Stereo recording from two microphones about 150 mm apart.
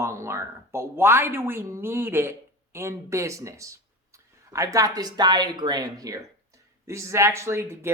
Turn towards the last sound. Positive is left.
turn(degrees=-15)  # may be behind; listen again after turning